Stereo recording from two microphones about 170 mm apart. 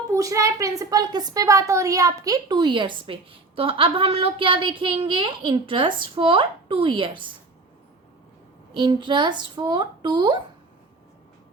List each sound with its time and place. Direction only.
0.1 s a woman's voice: 20° right (ahead or behind)
8.7 s a woman's voice: 25° right (ahead or behind)